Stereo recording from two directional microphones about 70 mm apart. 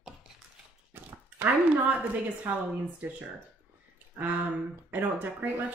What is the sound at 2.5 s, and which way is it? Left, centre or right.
Speech, right.